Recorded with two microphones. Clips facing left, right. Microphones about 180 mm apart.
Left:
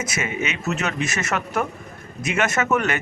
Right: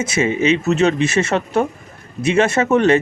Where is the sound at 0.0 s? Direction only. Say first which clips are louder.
Right 9 dB; 30° right (ahead or behind).